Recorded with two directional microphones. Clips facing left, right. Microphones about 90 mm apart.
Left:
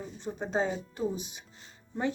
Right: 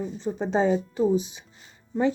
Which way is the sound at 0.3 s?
90° right.